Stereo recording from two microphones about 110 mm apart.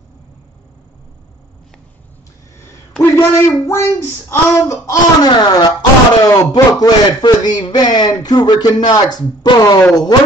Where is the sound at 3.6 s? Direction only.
25° left (ahead or behind).